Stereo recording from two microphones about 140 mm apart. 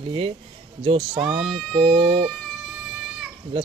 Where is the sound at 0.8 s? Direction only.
45° right (ahead or behind).